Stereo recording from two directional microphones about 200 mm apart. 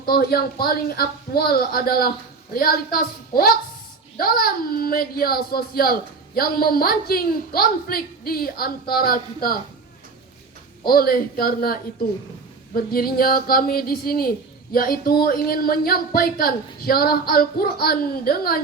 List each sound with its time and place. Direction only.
0.0 s speech: 50° left (ahead or behind)
10.8 s speech: 50° left (ahead or behind)